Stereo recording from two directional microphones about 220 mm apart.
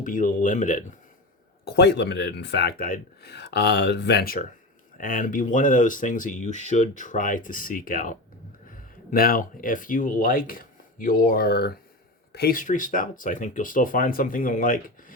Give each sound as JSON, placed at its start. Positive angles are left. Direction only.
{"t": 0.0, "sound": "speech", "side_deg": 35}
{"t": 1.6, "sound": "speech", "side_deg": 50}